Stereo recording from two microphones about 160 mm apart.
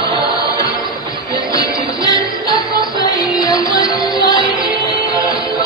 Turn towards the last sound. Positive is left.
turn(degrees=25)  # may be behind; listen again after turning